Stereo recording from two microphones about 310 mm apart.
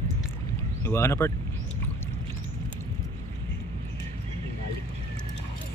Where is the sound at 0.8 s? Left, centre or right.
Centre.